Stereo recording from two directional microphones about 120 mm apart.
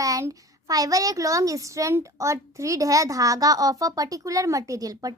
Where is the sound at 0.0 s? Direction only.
25° right (ahead or behind).